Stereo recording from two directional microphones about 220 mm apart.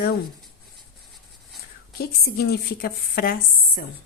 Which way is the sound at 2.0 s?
45° left (ahead or behind).